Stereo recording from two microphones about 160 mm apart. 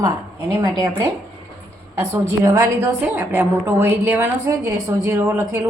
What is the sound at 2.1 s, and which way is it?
A woman's voice, 20° right (ahead or behind).